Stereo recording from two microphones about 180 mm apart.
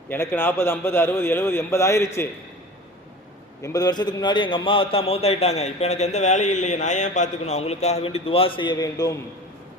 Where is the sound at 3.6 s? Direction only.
20° left (ahead or behind).